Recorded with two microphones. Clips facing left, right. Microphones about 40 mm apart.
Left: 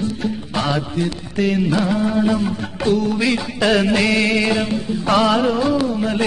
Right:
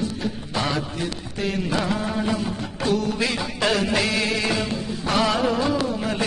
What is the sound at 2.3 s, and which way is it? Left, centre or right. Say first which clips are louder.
Music: left 6 dB; centre.